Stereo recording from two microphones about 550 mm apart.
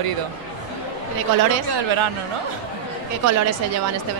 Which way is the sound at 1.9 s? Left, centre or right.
Right.